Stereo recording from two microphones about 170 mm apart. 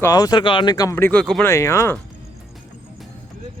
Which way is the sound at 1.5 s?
15° left (ahead or behind).